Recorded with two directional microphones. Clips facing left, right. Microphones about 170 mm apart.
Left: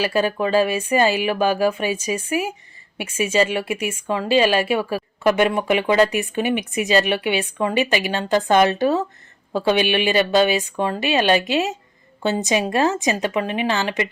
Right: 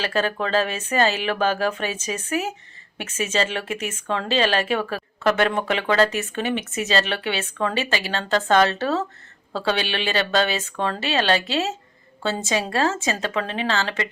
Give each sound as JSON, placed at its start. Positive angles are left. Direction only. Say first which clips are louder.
{"t": 0.0, "sound": "speech", "louder": "left 4 dB", "side_deg": 10}